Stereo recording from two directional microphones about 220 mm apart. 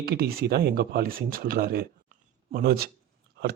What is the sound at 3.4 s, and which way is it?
Chewing, 55° right (ahead or behind).